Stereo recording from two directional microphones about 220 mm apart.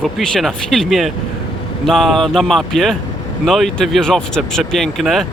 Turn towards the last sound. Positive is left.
turn(degrees=0)  # may be behind; listen again after turning